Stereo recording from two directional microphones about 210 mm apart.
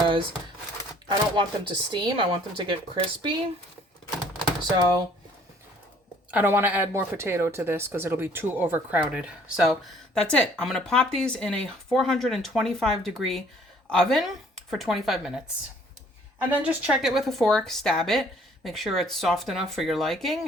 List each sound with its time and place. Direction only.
0.0 s a sound: 25° right (ahead or behind)
1.0 s speech: 20° right (ahead or behind)
6.3 s speech: 10° right (ahead or behind)
16.5 s speech: 5° right (ahead or behind)